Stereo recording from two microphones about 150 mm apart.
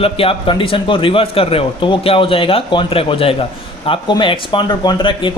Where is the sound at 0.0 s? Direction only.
40° left (ahead or behind).